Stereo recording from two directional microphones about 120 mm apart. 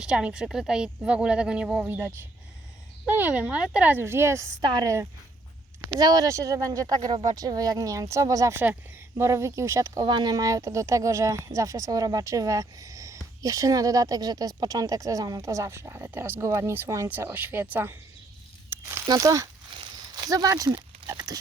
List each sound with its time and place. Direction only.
0.0 s a woman's voice: 5° right (ahead or behind)
4.6 s speech: 35° right (ahead or behind)
7.1 s speech: 45° right (ahead or behind)
7.3 s speech: 30° right (ahead or behind)
18.7 s a sound: 20° right (ahead or behind)
19.0 s speech: 30° right (ahead or behind)
21.1 s pig: 35° right (ahead or behind)